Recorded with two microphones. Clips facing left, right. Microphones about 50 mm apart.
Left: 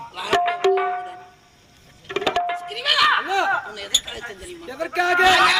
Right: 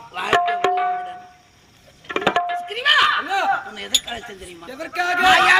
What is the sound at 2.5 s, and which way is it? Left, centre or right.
Speech, right.